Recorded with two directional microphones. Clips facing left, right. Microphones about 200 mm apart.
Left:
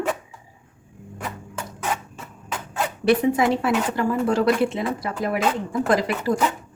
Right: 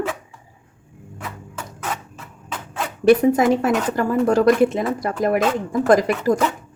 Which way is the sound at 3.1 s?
45° right (ahead or behind).